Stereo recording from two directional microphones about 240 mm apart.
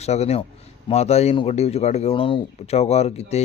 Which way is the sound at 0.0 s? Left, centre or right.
Left.